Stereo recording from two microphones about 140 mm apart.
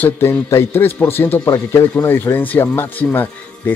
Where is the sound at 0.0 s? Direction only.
15° left (ahead or behind).